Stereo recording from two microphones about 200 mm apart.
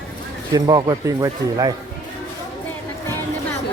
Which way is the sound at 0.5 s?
20° right (ahead or behind).